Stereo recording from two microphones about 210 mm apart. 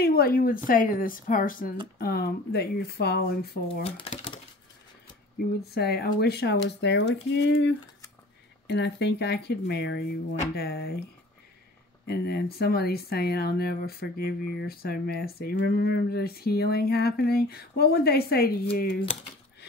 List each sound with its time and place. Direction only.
0.0 s a woman's voice: 45° left (ahead or behind)
3.8 s typewriter: 25° left (ahead or behind)
5.6 s speech: 50° left (ahead or behind)
12.1 s speech: 50° left (ahead or behind)